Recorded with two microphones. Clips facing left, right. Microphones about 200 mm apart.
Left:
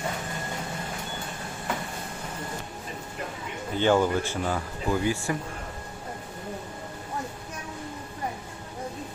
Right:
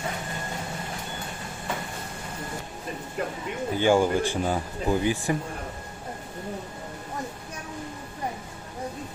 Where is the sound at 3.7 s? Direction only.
10° right (ahead or behind).